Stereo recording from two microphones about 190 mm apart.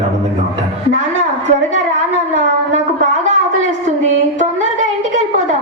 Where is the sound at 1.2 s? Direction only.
40° right (ahead or behind).